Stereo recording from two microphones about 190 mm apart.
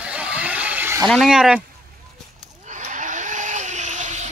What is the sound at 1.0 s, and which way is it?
Speech, centre (ahead or behind).